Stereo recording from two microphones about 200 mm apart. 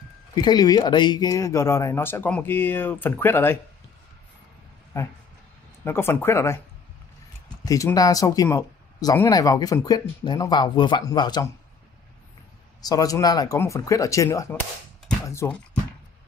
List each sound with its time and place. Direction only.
0.3 s speech: 20° left (ahead or behind)
5.9 s speech: 10° left (ahead or behind)
7.6 s speech: 15° left (ahead or behind)
12.8 s speech: 15° left (ahead or behind)